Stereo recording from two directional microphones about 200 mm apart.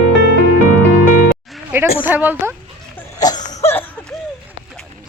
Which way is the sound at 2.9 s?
20° left (ahead or behind).